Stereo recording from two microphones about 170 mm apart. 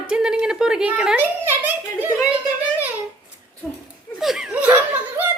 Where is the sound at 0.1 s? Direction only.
5° right (ahead or behind).